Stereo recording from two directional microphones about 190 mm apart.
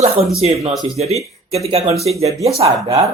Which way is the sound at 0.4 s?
35° right (ahead or behind).